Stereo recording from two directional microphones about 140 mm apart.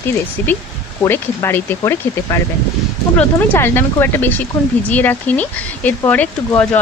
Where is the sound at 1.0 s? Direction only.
15° left (ahead or behind).